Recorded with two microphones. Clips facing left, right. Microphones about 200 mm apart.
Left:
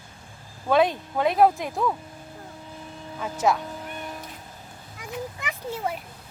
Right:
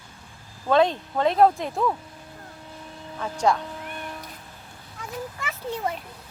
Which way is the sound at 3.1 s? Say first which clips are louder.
Right 1 dB; 5° left (ahead or behind).